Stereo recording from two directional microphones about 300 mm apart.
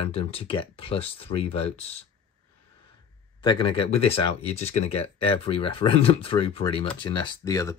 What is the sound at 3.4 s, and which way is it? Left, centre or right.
Speech, centre.